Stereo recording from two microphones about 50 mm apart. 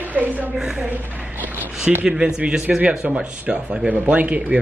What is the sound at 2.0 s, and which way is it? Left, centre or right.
Speech, right.